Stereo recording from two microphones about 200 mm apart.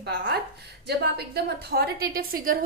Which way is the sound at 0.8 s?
55° right (ahead or behind).